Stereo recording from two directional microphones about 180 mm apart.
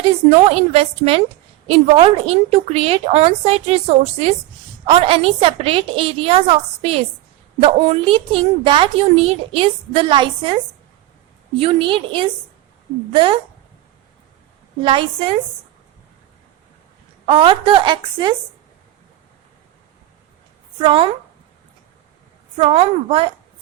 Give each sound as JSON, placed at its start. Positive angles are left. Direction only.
{"t": 0.3, "sound": "a woman's voice", "side_deg": -35}
{"t": 11.6, "sound": "a woman's voice", "side_deg": -30}
{"t": 14.8, "sound": "a woman's voice", "side_deg": -30}
{"t": 17.2, "sound": "a woman's voice", "side_deg": -30}
{"t": 20.8, "sound": "a woman's voice", "side_deg": -30}
{"t": 22.5, "sound": "a woman's voice", "side_deg": -30}